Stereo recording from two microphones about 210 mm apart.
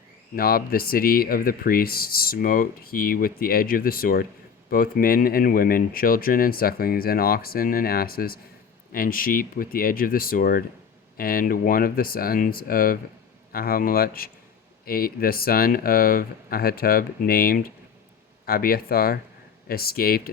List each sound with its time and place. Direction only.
0.3 s speech: 45° left (ahead or behind)